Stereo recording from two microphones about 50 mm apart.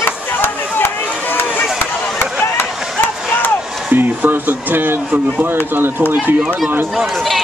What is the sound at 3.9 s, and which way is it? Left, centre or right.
Speech, right.